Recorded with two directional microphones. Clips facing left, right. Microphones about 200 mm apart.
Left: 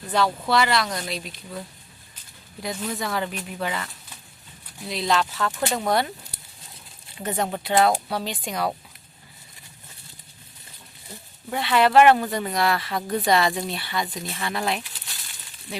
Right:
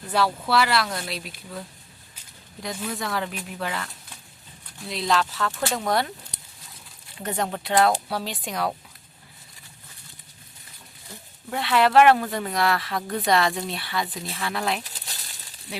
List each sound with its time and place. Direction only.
0.4 s speech: 5° right (ahead or behind)
2.6 s speech: 5° left (ahead or behind)
4.9 s speech: centre (ahead or behind)
7.2 s speech: 5° left (ahead or behind)
11.5 s speech: centre (ahead or behind)
14.8 s crumpling: 35° right (ahead or behind)